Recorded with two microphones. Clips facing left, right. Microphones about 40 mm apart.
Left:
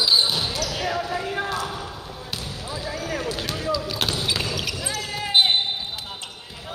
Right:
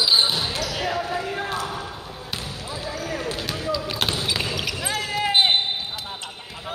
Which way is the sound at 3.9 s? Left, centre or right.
Right.